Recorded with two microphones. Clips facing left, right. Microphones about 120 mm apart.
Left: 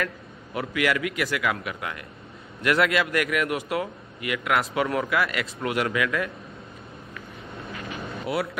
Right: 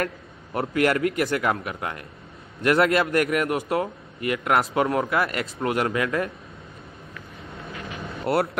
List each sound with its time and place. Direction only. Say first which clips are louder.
0.0 s a man's voice: right 2 dB; 40° right (ahead or behind)
8.3 s speech: right 5 dB; 70° right (ahead or behind)